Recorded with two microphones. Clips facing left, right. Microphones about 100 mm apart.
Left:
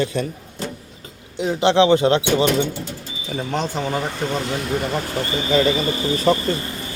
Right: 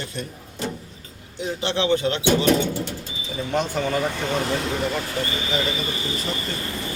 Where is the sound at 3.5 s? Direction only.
30° left (ahead or behind).